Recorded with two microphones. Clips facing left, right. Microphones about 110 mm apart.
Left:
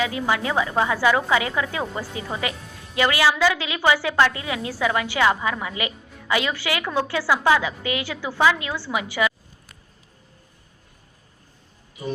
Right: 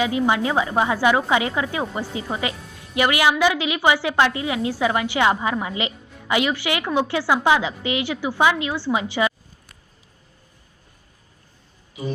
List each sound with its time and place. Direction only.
0.0 s speech: 20° right (ahead or behind)